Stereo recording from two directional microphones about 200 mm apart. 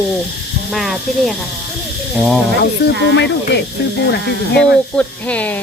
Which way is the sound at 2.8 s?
55° left (ahead or behind).